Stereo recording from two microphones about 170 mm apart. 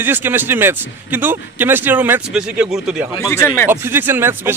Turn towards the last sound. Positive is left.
turn(degrees=-15)  # may be behind; listen again after turning